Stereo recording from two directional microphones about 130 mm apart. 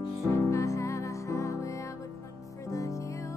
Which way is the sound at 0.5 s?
25° left (ahead or behind).